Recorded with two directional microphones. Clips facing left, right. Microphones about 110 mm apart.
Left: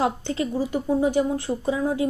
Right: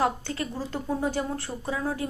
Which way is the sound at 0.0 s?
20° left (ahead or behind).